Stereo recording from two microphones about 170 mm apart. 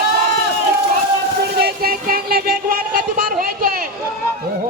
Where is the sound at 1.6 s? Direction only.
60° right (ahead or behind).